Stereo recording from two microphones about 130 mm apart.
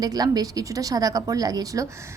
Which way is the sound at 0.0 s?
30° right (ahead or behind).